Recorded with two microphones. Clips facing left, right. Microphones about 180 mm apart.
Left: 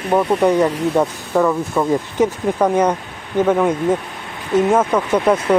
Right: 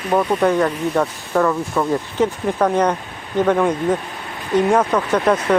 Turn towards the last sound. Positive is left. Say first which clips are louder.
# left 1 dB
turn(degrees=10)  # may be behind; listen again after turning